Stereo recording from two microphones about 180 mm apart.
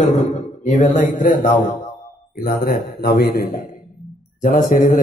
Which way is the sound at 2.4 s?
60° left (ahead or behind).